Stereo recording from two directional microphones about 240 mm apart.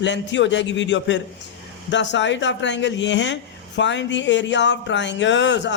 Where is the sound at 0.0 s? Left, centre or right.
Left.